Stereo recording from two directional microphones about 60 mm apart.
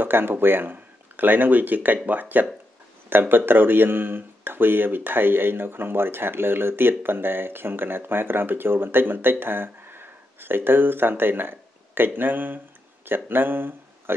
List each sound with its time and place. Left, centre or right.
0.0 s speech: right